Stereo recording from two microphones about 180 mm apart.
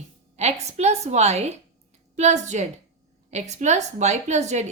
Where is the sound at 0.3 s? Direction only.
40° right (ahead or behind).